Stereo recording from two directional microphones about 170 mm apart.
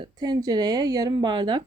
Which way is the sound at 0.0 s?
25° right (ahead or behind).